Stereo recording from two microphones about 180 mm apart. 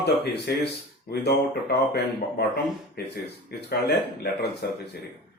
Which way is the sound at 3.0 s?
65° left (ahead or behind).